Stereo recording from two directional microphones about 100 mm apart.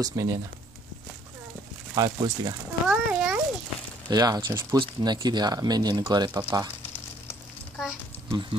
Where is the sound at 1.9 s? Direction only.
45° right (ahead or behind).